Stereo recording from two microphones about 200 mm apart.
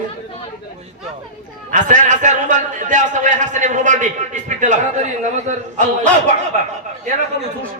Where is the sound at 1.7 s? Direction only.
40° right (ahead or behind).